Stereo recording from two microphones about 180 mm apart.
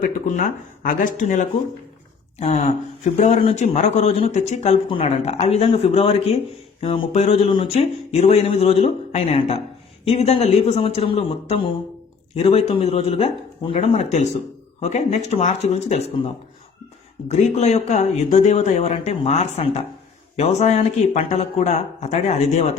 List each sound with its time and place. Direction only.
0.0 s speech: 45° left (ahead or behind)
17.2 s speech: 40° left (ahead or behind)